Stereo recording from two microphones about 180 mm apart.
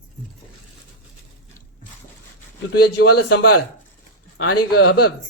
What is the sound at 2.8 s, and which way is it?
Speech, 65° left (ahead or behind).